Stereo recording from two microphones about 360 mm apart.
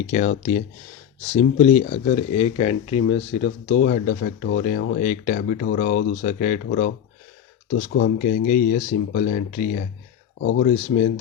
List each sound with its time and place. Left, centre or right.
0.1 s speech: centre